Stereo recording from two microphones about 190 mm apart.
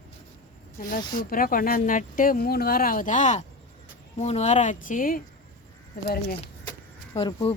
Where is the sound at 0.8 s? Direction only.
45° left (ahead or behind).